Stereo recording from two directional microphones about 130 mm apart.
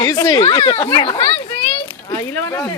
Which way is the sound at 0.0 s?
35° left (ahead or behind).